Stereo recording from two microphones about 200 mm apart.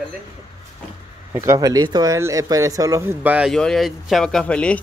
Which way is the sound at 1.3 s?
15° right (ahead or behind).